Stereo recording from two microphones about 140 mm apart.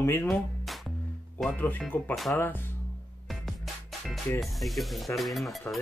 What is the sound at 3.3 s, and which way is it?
Music, centre (ahead or behind).